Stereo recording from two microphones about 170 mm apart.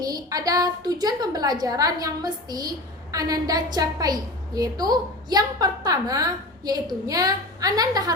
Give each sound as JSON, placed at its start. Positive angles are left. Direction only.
{"t": 0.0, "sound": "a woman's voice", "side_deg": -20}